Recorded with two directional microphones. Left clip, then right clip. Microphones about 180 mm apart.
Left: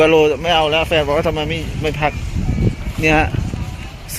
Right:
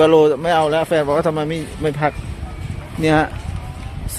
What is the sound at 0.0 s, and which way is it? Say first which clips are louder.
Speech: even; 25° right (ahead or behind).